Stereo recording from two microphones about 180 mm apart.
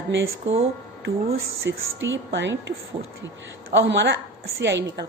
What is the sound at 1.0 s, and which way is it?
A woman's voice, 65° right (ahead or behind).